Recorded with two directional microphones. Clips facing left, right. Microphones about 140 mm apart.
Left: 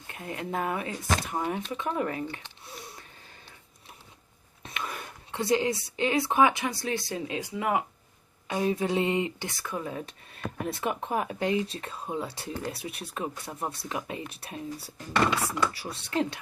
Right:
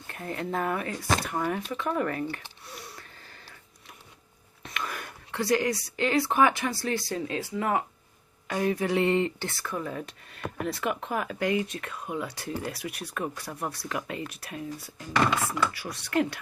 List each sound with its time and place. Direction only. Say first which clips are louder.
0.1 s speech: right 2 dB; 15° left (ahead or behind)
2.6 s a sound: even; 25° left (ahead or behind)
4.6 s speech: right 1 dB; 25° left (ahead or behind)